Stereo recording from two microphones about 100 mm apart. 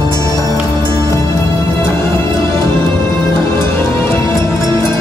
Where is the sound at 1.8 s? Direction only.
25° left (ahead or behind).